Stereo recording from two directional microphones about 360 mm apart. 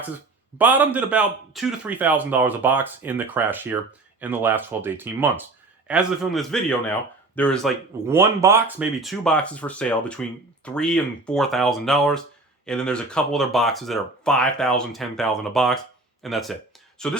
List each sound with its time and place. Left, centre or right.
0.6 s speech: centre